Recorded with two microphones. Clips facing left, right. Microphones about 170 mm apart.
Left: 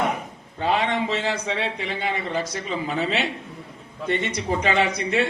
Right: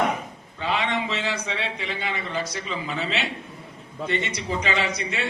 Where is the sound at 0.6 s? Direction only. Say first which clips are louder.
Left 3 dB; 45° left (ahead or behind).